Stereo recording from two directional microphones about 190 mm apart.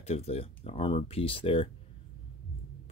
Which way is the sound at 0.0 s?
35° left (ahead or behind).